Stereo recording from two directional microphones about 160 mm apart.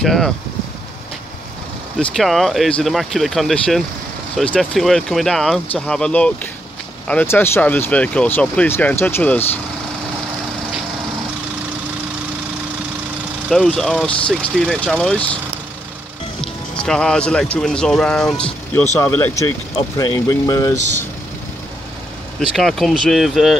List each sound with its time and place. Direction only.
0.0 s speech: 5° left (ahead or behind)
2.0 s speech: centre (ahead or behind)
13.5 s speech: 5° left (ahead or behind)
16.3 s speech: 5° left (ahead or behind); by 20.7 s 20° left (ahead or behind)
22.6 s speech: centre (ahead or behind)